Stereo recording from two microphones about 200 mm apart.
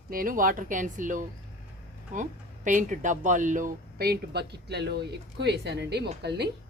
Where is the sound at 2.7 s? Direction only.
40° right (ahead or behind); by 6.5 s 55° right (ahead or behind).